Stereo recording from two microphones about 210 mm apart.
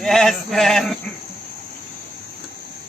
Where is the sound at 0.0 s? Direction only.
Centre (ahead or behind).